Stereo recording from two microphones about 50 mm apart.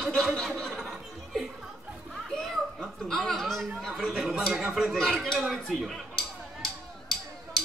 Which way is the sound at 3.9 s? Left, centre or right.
Centre.